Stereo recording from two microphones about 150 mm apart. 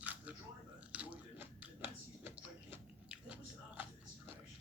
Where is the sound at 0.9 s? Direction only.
10° right (ahead or behind).